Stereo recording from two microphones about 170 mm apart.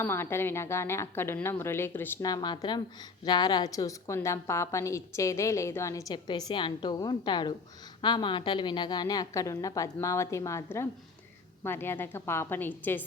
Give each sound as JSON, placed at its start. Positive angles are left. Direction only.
{"t": 0.0, "sound": "a woman's voice", "side_deg": 15}